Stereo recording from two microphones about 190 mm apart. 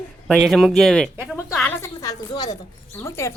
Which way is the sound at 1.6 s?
15° left (ahead or behind).